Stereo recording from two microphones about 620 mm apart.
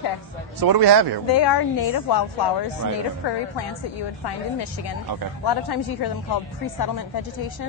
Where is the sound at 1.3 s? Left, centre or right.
Left.